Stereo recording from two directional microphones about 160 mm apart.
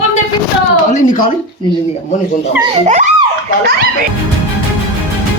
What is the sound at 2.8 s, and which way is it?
Speech, 50° right (ahead or behind).